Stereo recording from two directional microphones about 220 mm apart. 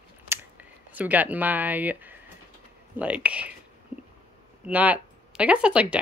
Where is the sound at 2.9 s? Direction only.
5° right (ahead or behind).